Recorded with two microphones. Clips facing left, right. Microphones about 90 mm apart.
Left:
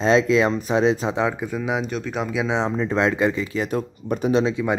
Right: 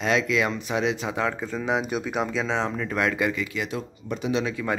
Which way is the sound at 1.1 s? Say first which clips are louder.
Left 4 dB; 15° left (ahead or behind).